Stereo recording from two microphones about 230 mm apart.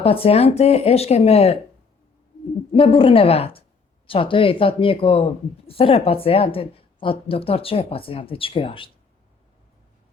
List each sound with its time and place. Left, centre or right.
0.0 s speech: left
2.7 s speech: left